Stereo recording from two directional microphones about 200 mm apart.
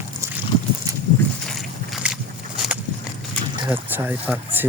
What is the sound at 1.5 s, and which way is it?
Boat, centre (ahead or behind).